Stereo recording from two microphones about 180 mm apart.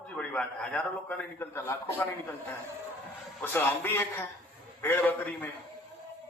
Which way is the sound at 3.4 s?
10° left (ahead or behind).